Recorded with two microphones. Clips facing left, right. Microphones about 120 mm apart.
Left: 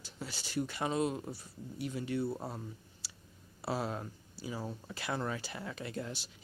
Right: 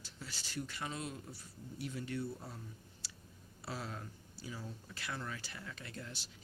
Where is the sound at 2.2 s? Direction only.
75° left (ahead or behind).